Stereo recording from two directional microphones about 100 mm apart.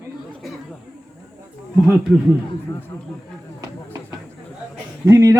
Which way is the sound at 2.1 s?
5° right (ahead or behind).